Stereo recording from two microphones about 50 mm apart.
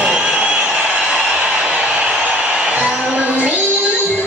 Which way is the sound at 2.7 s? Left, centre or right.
Right.